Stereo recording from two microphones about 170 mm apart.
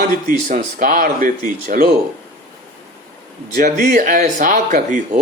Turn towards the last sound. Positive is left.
turn(degrees=-45)  # may be behind; listen again after turning